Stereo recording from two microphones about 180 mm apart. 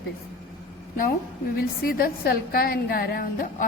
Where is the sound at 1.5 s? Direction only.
55° left (ahead or behind).